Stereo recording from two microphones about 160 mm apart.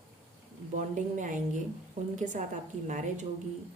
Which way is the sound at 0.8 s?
50° right (ahead or behind).